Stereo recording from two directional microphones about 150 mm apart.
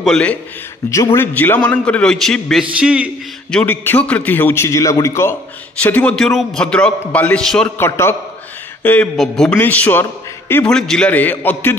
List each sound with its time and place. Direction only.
0.0 s a man's voice: 5° left (ahead or behind)
3.5 s a man's voice: 15° left (ahead or behind)
7.8 s a man's voice: 15° left (ahead or behind)